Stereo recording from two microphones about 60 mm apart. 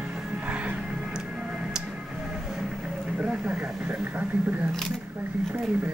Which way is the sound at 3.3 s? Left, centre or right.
Centre.